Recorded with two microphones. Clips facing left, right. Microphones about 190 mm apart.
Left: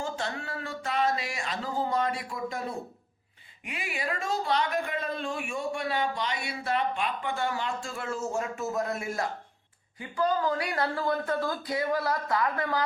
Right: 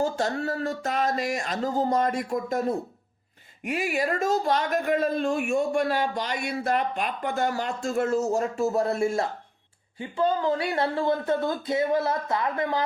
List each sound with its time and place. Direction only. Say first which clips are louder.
0.0 s speech: right 8 dB; 40° right (ahead or behind); by 12.8 s 20° right (ahead or behind)